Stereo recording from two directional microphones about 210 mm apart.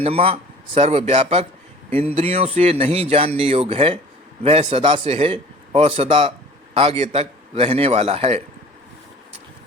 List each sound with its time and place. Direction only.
0.0 s speech: 25° right (ahead or behind)